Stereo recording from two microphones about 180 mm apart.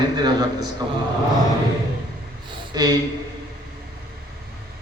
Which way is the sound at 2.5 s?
20° right (ahead or behind).